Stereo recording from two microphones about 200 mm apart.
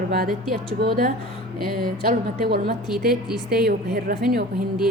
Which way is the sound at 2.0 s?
45° right (ahead or behind).